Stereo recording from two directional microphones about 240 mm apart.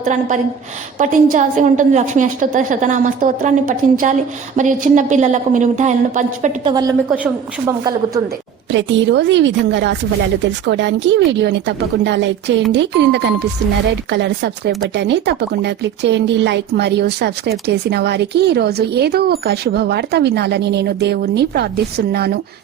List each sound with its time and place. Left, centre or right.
0.0 s a woman's voice: right
6.7 s speech: centre
8.7 s speech: right